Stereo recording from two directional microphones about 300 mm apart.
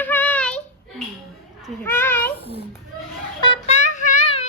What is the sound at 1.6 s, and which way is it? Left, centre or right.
Children playing, centre.